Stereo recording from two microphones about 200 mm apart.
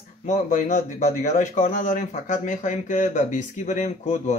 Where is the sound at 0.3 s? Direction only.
35° left (ahead or behind).